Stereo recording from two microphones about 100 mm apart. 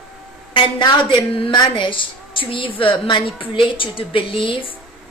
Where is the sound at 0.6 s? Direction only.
55° left (ahead or behind).